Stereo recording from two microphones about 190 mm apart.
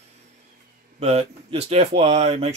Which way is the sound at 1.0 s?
35° right (ahead or behind).